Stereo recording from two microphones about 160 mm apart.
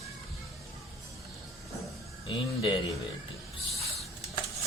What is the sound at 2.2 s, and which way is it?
Speech, 30° left (ahead or behind).